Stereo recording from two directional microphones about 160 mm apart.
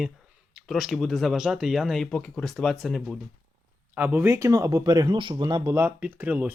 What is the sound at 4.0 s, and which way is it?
Speech, 10° right (ahead or behind).